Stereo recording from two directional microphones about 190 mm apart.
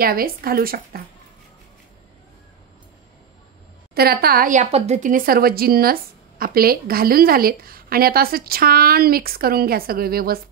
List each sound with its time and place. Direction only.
0.0 s a woman's voice: 50° right (ahead or behind)
3.9 s a woman's voice: 55° right (ahead or behind)